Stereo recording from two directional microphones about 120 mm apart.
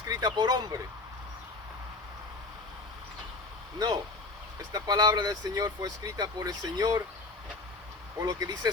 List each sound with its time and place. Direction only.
0.0 s speech: 30° right (ahead or behind)
3.8 s speech: 30° right (ahead or behind)
8.2 s speech: 30° right (ahead or behind)